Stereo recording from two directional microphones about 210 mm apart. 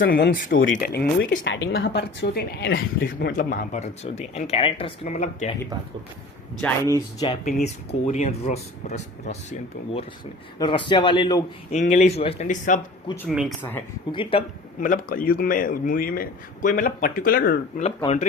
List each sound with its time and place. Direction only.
0.0 s a woman's voice: 45° left (ahead or behind)
6.8 s speech: 15° left (ahead or behind)
7.4 s a woman's voice: 40° left (ahead or behind); by 11.4 s 20° left (ahead or behind)
11.7 s a woman's voice: 35° left (ahead or behind)
13.2 s speech: 5° right (ahead or behind)
14.1 s a man's voice: 25° left (ahead or behind)
14.8 s a woman's voice: 40° left (ahead or behind)
17.8 s a woman's voice: 30° left (ahead or behind)